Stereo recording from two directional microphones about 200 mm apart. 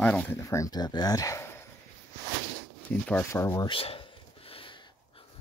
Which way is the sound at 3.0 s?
10° left (ahead or behind).